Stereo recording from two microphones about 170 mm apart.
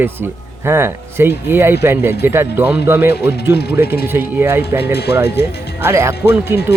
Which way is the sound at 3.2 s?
75° left (ahead or behind).